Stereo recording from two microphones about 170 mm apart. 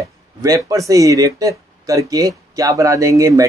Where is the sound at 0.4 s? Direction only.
20° right (ahead or behind).